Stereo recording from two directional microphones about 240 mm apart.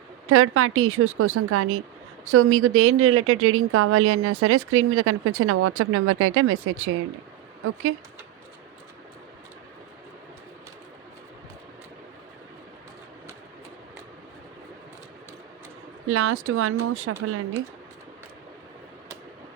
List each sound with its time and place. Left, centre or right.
0.3 s a woman's voice: right
16.0 s a woman's voice: right